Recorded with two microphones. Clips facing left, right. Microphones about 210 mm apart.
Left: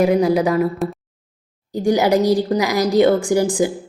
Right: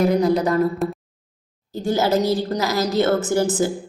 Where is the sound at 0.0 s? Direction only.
10° left (ahead or behind).